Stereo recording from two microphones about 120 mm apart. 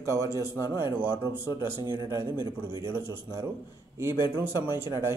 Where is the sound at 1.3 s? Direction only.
40° left (ahead or behind).